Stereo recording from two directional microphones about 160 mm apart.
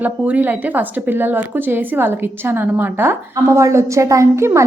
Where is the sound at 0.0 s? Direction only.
10° right (ahead or behind).